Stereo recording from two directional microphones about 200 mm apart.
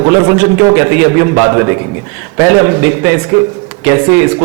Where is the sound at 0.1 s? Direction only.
15° right (ahead or behind).